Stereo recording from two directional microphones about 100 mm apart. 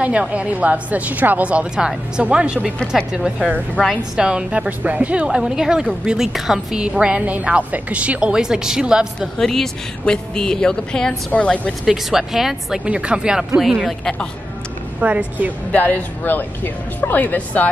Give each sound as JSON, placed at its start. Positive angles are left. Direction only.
{"t": 0.0, "sound": "a woman's voice", "side_deg": -10}
{"t": 9.4, "sound": "speech", "side_deg": 5}
{"t": 11.8, "sound": "speech", "side_deg": -5}
{"t": 15.0, "sound": "a woman's voice", "side_deg": -15}
{"t": 15.7, "sound": "a woman's voice", "side_deg": 20}